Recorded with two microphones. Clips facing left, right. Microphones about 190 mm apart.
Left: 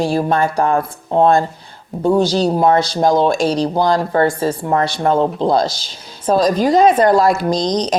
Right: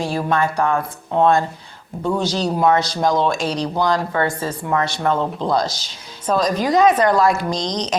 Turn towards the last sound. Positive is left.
turn(degrees=35)  # may be behind; listen again after turning